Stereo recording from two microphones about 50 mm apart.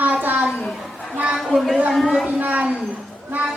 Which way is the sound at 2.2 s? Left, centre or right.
Right.